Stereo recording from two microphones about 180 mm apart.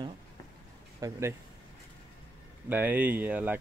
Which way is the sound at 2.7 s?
10° right (ahead or behind).